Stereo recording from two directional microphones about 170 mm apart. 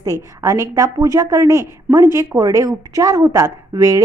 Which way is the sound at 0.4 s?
15° right (ahead or behind).